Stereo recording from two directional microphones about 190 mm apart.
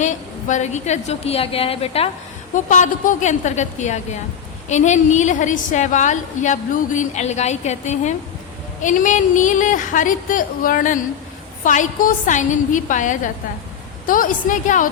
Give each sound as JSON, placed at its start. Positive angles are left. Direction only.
{"t": 0.0, "sound": "a woman's voice", "side_deg": 40}